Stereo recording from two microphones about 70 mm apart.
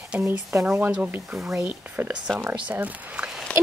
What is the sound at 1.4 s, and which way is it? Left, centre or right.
Speech, centre.